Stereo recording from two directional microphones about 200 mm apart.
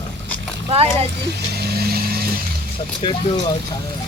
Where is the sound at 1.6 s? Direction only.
50° right (ahead or behind).